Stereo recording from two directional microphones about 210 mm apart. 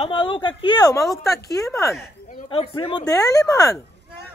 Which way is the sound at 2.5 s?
25° left (ahead or behind).